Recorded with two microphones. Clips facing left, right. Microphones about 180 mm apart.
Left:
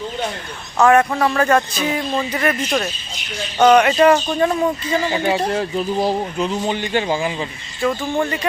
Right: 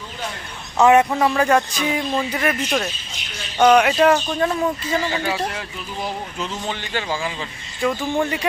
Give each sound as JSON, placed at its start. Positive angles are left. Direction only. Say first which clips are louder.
{"t": 0.8, "sound": "speech", "louder": "even", "side_deg": -20}
{"t": 1.1, "sound": "a man's voice", "louder": "left 1 dB", "side_deg": -5}
{"t": 5.1, "sound": "speech", "louder": "left 5 dB", "side_deg": 25}
{"t": 5.5, "sound": "speech", "louder": "left 11 dB", "side_deg": 35}
{"t": 6.4, "sound": "a man's voice", "louder": "left 5 dB", "side_deg": 15}
{"t": 7.8, "sound": "speech", "louder": "left 1 dB", "side_deg": 0}